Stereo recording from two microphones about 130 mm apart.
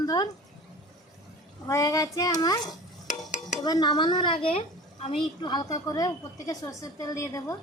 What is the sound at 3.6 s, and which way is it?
A woman's voice, 30° left (ahead or behind).